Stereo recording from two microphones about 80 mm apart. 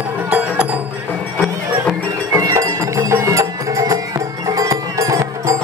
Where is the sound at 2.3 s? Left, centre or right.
Right.